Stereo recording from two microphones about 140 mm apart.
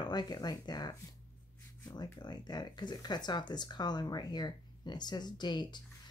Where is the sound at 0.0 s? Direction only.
30° left (ahead or behind).